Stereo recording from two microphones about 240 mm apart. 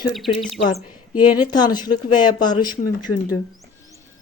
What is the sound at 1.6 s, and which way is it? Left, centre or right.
Speech, centre.